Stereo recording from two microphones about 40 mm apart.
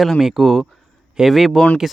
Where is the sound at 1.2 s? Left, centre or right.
Centre.